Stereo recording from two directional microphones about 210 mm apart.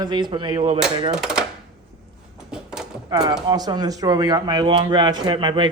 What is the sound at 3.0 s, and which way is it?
Speech, 20° right (ahead or behind).